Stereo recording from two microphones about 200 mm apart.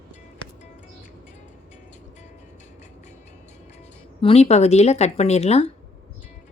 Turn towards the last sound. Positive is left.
turn(degrees=35)  # may be behind; listen again after turning